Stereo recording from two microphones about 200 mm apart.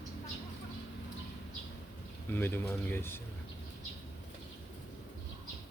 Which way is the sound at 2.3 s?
10° left (ahead or behind).